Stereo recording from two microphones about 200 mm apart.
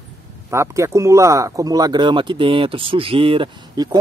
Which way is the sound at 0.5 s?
15° right (ahead or behind).